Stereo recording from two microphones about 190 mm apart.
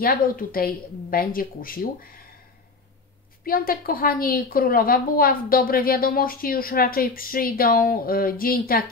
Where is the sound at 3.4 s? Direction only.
50° left (ahead or behind).